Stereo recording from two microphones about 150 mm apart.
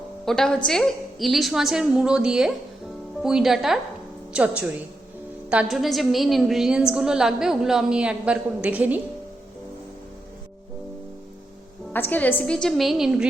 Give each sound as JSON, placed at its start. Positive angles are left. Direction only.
{"t": 0.3, "sound": "a woman's voice", "side_deg": 5}
{"t": 11.9, "sound": "a woman's voice", "side_deg": 10}